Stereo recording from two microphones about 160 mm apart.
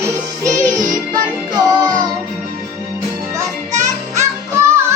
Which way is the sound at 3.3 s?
20° right (ahead or behind).